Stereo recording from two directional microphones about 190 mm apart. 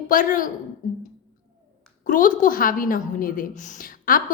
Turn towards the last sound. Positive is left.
turn(degrees=45)  # may be behind; listen again after turning